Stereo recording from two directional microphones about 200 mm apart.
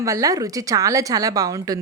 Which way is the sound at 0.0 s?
15° right (ahead or behind).